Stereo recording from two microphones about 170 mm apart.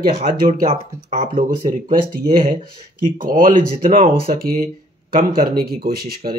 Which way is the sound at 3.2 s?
50° right (ahead or behind).